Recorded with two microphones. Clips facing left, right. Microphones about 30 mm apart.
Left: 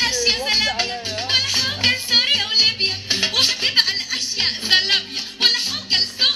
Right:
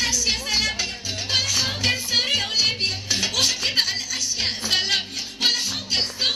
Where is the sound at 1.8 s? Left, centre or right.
Left.